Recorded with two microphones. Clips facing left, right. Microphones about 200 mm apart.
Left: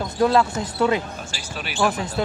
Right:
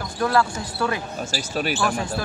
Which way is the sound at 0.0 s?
20° left (ahead or behind).